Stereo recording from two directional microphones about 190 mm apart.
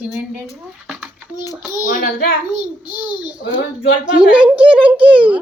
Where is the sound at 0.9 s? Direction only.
5° right (ahead or behind).